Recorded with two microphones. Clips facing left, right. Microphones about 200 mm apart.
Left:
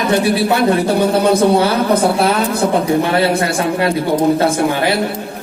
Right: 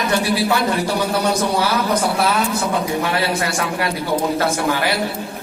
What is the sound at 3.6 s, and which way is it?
A man's voice, 25° left (ahead or behind).